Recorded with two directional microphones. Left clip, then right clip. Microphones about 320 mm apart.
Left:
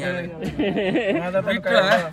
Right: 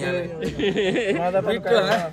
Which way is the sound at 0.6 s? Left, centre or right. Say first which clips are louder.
Even; centre.